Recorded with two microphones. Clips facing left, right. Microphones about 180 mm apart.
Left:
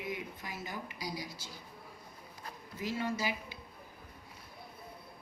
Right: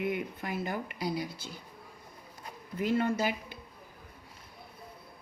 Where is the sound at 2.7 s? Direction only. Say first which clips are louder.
Right 7 dB; 55° right (ahead or behind).